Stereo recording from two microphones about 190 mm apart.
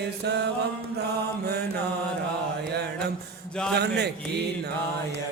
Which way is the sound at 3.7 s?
60° right (ahead or behind).